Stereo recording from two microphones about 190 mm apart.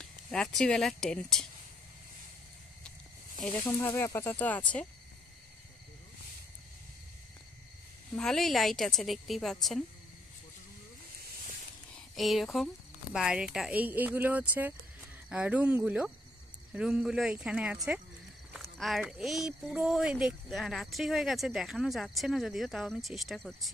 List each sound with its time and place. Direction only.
0.0 s speech: 5° left (ahead or behind)
3.6 s speech: 15° left (ahead or behind)
8.2 s speech: centre (ahead or behind)
11.9 s a sound: centre (ahead or behind)
13.1 s speech: 5° right (ahead or behind)